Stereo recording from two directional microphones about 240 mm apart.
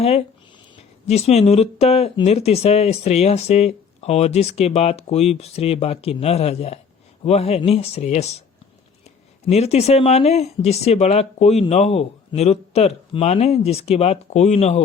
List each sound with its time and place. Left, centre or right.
0.0 s speech: left